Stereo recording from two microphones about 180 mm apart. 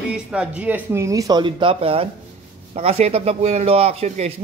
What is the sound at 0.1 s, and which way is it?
A man's voice, 5° right (ahead or behind).